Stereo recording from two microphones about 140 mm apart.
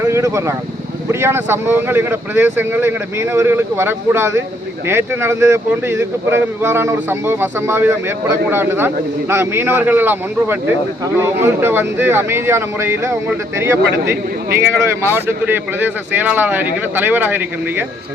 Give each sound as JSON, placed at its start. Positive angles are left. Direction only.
{"t": 0.0, "sound": "speech", "side_deg": -20}